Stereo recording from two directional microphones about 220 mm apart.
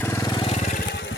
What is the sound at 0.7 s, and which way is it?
Vehicle, 45° left (ahead or behind).